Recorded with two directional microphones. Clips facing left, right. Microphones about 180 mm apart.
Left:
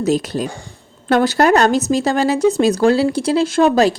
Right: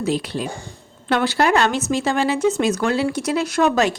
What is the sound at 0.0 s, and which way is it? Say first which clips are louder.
Speech: left 5 dB; 45° left (ahead or behind).